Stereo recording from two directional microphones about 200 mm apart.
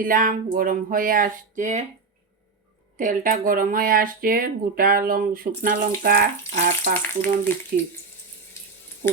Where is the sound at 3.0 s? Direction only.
40° right (ahead or behind).